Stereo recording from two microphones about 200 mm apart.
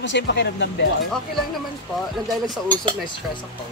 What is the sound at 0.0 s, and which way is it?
Speech, 60° left (ahead or behind).